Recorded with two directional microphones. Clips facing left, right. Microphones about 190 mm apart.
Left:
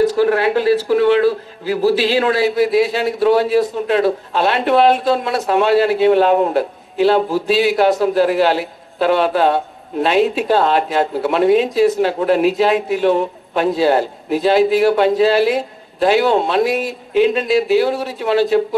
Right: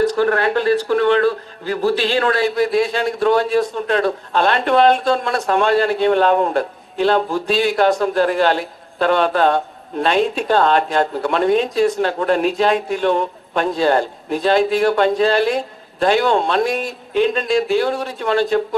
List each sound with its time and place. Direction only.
0.0 s speech: 5° left (ahead or behind)